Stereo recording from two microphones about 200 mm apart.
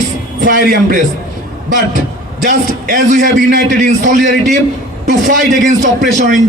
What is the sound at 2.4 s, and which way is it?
A man's voice, 45° right (ahead or behind).